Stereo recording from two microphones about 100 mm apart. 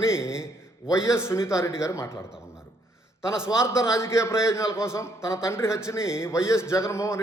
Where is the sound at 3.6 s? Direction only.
30° left (ahead or behind).